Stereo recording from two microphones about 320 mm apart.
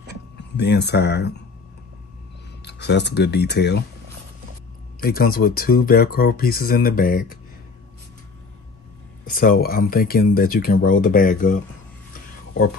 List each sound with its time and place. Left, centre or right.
0.6 s speech: left
2.6 s speech: left
5.0 s speech: left
9.2 s speech: left